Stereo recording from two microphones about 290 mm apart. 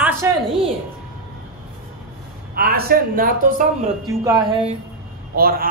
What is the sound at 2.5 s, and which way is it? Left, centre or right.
Speech, right.